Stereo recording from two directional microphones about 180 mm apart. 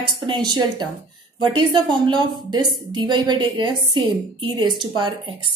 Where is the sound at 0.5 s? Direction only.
25° right (ahead or behind).